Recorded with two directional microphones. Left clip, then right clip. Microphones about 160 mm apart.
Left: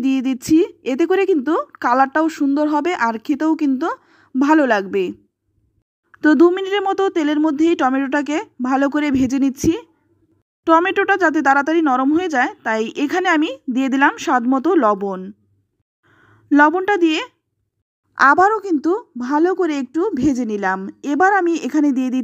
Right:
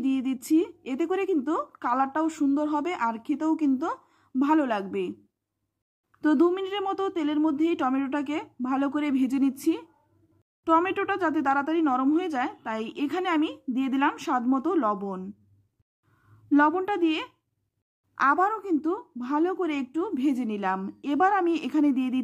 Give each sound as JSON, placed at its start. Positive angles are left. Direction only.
{"t": 0.0, "sound": "speech", "side_deg": 30}
{"t": 6.1, "sound": "a woman's voice", "side_deg": 30}